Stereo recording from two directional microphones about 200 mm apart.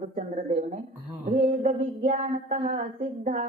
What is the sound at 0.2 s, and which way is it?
Music, 40° right (ahead or behind).